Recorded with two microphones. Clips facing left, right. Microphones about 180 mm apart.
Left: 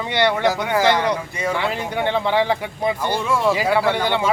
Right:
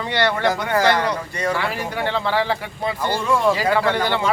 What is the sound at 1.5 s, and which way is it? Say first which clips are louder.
Speech: left 2 dB; 20° left (ahead or behind).